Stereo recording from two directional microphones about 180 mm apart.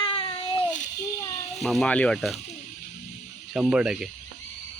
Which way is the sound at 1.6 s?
Centre (ahead or behind).